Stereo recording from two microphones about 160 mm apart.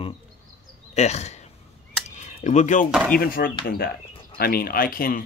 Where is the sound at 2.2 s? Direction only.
50° left (ahead or behind).